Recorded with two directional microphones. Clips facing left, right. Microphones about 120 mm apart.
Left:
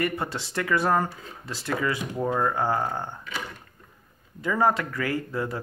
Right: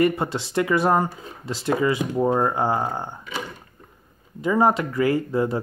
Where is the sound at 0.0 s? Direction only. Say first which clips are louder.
Right 7 dB; 20° right (ahead or behind).